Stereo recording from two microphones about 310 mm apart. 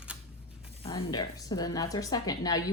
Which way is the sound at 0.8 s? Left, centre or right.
Centre.